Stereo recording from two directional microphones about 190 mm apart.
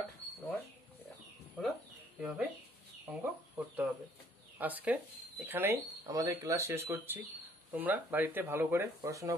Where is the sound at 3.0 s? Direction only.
10° right (ahead or behind).